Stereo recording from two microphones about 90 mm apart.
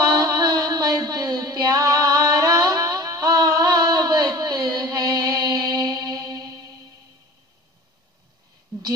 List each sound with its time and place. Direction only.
0.0 s music: 50° right (ahead or behind)